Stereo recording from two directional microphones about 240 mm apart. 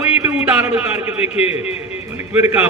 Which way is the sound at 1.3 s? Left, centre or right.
Left.